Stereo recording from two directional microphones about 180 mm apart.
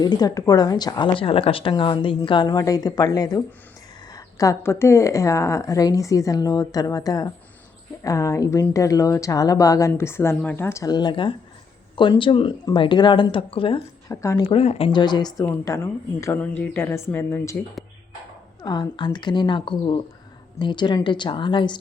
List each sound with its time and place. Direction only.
0.0 s speech: 20° left (ahead or behind)
14.1 s speech: 15° left (ahead or behind)
14.5 s speech: 35° left (ahead or behind); by 17.6 s 15° left (ahead or behind)
18.6 s speech: 25° left (ahead or behind)